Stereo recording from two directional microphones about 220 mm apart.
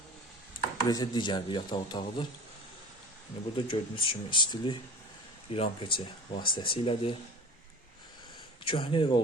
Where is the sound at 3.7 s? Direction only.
25° left (ahead or behind).